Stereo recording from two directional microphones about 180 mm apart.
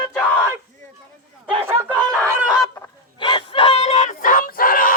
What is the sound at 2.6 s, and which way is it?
Fowl, 20° left (ahead or behind).